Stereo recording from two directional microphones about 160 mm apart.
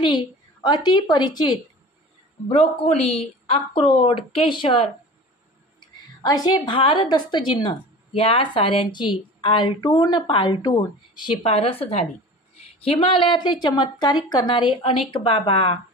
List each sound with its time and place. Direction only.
0.0 s a woman's voice: 30° left (ahead or behind)
2.5 s a woman's voice: 45° left (ahead or behind); by 11.3 s 25° left (ahead or behind)
11.4 s a woman's voice: 40° left (ahead or behind)